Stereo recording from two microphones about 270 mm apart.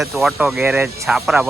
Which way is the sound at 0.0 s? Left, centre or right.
Centre.